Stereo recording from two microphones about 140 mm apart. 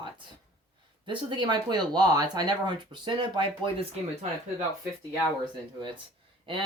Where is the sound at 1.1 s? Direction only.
35° right (ahead or behind).